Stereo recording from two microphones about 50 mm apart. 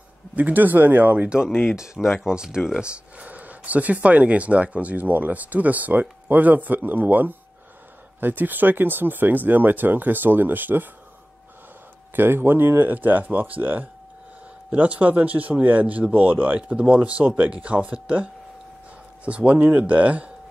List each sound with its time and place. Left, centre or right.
0.4 s speech: right
1.5 s speech: left
2.2 s speech: centre
2.8 s speech: right
12.2 s speech: right